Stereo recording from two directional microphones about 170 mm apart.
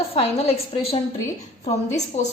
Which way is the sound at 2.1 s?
40° left (ahead or behind).